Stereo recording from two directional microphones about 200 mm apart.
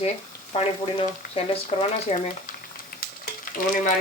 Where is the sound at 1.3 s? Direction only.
30° left (ahead or behind).